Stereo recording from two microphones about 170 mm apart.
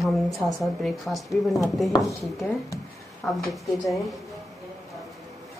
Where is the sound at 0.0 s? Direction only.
Centre (ahead or behind).